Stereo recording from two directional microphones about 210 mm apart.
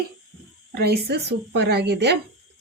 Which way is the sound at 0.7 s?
50° right (ahead or behind).